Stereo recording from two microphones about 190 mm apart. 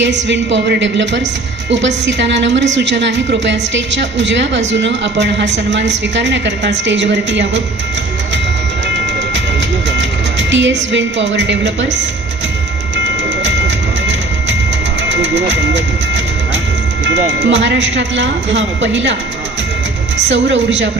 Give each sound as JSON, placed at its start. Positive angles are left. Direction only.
{"t": 0.0, "sound": "a woman's voice", "side_deg": -70}
{"t": 10.0, "sound": "speech", "side_deg": -75}
{"t": 13.4, "sound": "music", "side_deg": -70}
{"t": 17.4, "sound": "a woman's voice", "side_deg": -70}
{"t": 20.2, "sound": "a woman's voice", "side_deg": -70}